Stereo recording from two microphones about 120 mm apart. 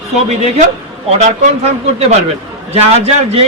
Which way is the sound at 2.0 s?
60° right (ahead or behind).